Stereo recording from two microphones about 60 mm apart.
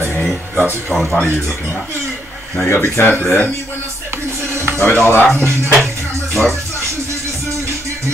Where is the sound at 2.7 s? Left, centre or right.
Left.